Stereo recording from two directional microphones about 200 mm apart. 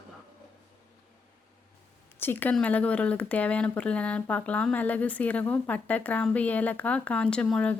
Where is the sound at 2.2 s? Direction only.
10° left (ahead or behind).